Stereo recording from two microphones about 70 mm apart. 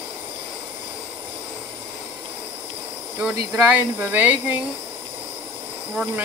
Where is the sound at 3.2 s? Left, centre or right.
Centre.